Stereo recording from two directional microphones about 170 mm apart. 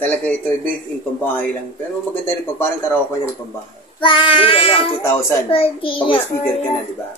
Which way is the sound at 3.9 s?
30° left (ahead or behind).